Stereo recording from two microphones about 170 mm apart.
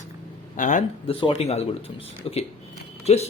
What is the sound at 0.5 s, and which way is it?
Speech, 50° left (ahead or behind).